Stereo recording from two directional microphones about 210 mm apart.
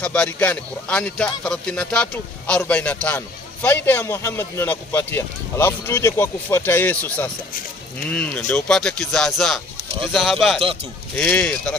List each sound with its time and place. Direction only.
0.0 s speech: 5° left (ahead or behind)
10.6 s speech: 25° right (ahead or behind)
11.1 s speech: 5° left (ahead or behind)